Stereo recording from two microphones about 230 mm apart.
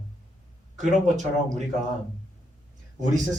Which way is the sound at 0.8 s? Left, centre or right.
Right.